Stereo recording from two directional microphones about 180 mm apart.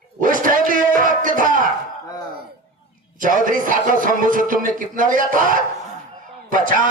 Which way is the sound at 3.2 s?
50° right (ahead or behind).